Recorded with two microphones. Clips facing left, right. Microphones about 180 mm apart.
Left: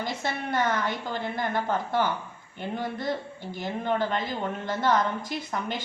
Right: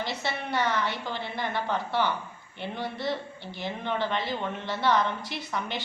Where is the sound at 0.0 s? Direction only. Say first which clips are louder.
Left 1 dB; 45° left (ahead or behind).